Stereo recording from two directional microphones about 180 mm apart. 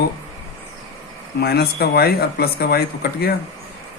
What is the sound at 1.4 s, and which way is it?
Speech, 60° left (ahead or behind).